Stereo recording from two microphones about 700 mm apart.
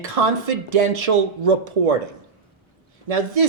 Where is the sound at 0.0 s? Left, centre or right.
Right.